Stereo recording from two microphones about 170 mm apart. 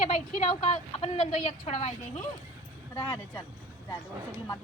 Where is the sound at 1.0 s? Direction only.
35° left (ahead or behind).